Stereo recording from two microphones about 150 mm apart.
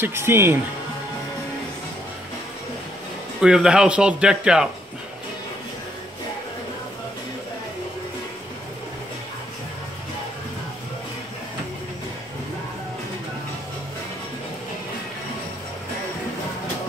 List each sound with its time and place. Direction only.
0.0 s speech: 15° right (ahead or behind)
3.3 s speech: 5° right (ahead or behind)